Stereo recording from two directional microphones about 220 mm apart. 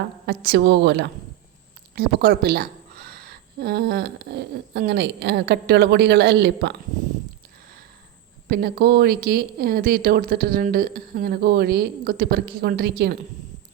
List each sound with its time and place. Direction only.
0.3 s speech: 50° right (ahead or behind)
8.4 s speech: 45° right (ahead or behind)